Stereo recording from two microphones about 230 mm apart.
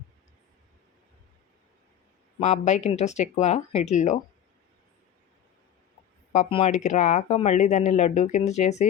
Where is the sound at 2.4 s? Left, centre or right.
Left.